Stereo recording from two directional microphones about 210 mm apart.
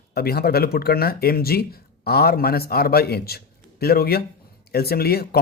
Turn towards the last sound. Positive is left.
turn(degrees=50)  # may be behind; listen again after turning